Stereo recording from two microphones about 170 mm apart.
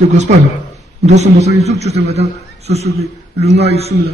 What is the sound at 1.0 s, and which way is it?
A man's voice, 40° right (ahead or behind).